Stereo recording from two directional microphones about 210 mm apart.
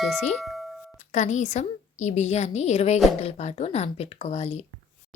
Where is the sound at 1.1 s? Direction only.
35° left (ahead or behind).